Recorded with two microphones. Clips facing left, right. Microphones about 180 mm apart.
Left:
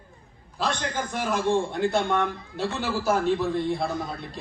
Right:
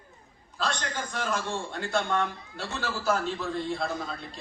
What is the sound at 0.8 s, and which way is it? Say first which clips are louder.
A man's voice: left 4 dB; 20° left (ahead or behind).